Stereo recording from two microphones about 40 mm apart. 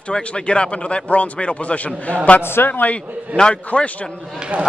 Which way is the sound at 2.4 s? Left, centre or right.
Left.